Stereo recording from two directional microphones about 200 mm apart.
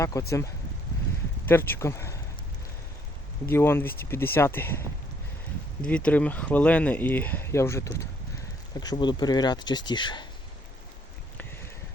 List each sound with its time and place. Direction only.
0.0 s speech: 15° left (ahead or behind)
3.5 s speech: 10° left (ahead or behind)
6.1 s speech: 5° left (ahead or behind); by 10.2 s 20° left (ahead or behind)